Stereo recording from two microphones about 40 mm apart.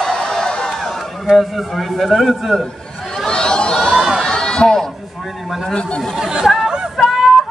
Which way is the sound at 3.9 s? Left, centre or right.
Centre.